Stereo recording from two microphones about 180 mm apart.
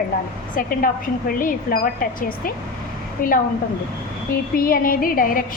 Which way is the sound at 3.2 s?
50° left (ahead or behind).